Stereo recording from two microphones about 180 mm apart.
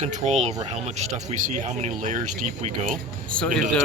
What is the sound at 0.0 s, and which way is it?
Speech, 40° right (ahead or behind).